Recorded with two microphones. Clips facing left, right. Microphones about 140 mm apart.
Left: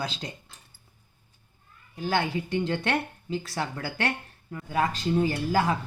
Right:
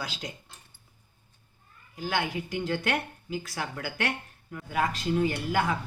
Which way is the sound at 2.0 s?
30° left (ahead or behind).